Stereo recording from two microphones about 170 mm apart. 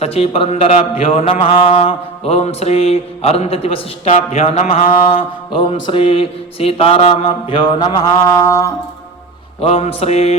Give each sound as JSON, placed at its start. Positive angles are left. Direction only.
{"t": 0.0, "sound": "mantra", "side_deg": 35}
{"t": 5.1, "sound": "mantra", "side_deg": 30}
{"t": 9.6, "sound": "mantra", "side_deg": 35}